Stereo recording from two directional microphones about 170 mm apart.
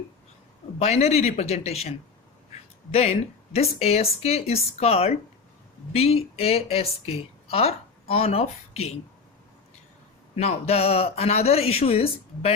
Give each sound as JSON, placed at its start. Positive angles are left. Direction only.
{"t": 0.8, "sound": "a woman's voice", "side_deg": 40}
{"t": 10.3, "sound": "a woman's voice", "side_deg": 35}